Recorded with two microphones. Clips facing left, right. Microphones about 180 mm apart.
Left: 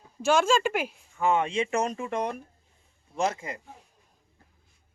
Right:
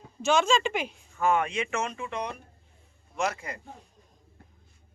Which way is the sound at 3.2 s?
25° left (ahead or behind).